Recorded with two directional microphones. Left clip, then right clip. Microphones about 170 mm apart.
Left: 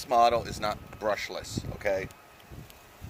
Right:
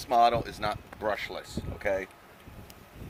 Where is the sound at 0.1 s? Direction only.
30° left (ahead or behind).